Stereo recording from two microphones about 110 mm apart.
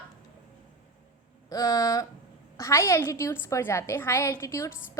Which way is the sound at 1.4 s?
35° left (ahead or behind).